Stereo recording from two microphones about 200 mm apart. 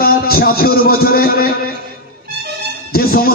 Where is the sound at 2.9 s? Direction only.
50° left (ahead or behind).